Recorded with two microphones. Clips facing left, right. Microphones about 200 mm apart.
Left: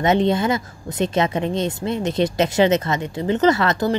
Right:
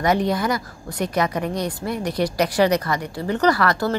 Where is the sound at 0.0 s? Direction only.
25° left (ahead or behind).